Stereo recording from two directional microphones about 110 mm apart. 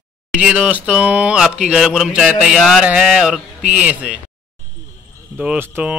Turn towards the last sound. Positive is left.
turn(degrees=-10)  # may be behind; listen again after turning